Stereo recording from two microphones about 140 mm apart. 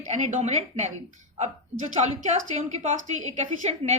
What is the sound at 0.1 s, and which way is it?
Speech, 55° right (ahead or behind).